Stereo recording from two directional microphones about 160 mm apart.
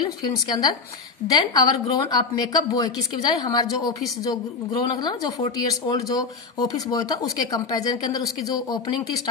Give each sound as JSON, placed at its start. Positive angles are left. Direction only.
{"t": 0.0, "sound": "a woman's voice", "side_deg": 25}